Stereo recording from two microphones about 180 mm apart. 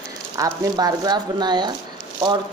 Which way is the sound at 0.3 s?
20° right (ahead or behind).